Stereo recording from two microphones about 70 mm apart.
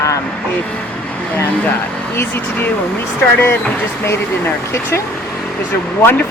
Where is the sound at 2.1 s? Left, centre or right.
Left.